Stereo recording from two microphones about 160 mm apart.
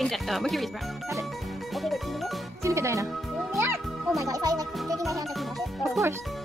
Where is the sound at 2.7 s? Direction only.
20° right (ahead or behind).